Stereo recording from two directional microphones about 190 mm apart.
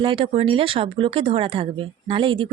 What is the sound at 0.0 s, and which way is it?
Speech, 25° right (ahead or behind).